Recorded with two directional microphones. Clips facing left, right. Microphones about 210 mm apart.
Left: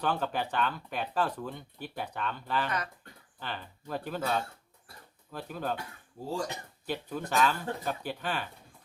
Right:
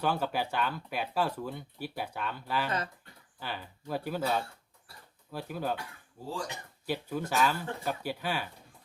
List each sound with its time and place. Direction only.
0.0 s speech: 10° right (ahead or behind)
2.6 s speech: 25° right (ahead or behind)
3.4 s speech: 10° right (ahead or behind)
6.8 s speech: 10° right (ahead or behind)